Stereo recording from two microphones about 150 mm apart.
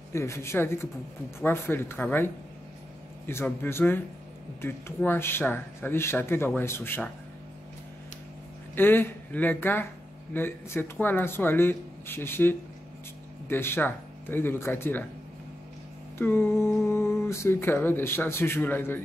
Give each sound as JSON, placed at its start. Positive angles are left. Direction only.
{"t": 0.1, "sound": "speech", "side_deg": 20}
{"t": 8.7, "sound": "speech", "side_deg": 15}
{"t": 16.2, "sound": "speech", "side_deg": 15}